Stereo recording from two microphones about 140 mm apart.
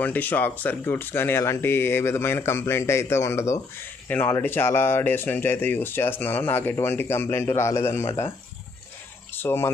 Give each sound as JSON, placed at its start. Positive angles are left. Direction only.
{"t": 0.0, "sound": "speech", "side_deg": 10}
{"t": 9.3, "sound": "cricket", "side_deg": 15}